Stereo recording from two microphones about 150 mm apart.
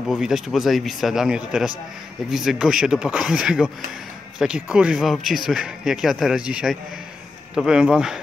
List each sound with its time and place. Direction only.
0.1 s speech: centre (ahead or behind)